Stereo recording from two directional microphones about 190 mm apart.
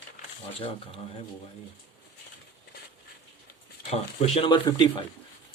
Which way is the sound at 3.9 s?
30° left (ahead or behind).